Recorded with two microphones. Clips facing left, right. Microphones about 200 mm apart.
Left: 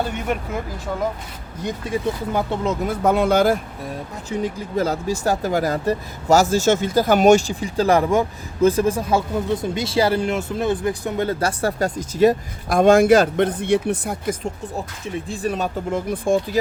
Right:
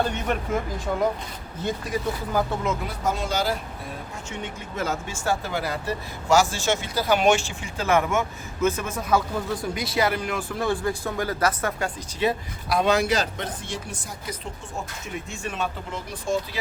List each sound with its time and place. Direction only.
0.3 s speech: 10° left (ahead or behind)
1.9 s speech: 25° left (ahead or behind)
2.8 s speech: 60° left (ahead or behind)
4.3 s speech: 35° left (ahead or behind); by 14.5 s 55° left (ahead or behind)
15.0 s speech: 35° left (ahead or behind); by 16.6 s 55° left (ahead or behind)